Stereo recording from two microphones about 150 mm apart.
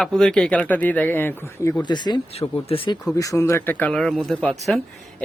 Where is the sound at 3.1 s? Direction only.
20° left (ahead or behind).